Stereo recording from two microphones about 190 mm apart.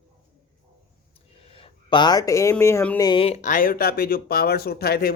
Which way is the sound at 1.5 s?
30° left (ahead or behind).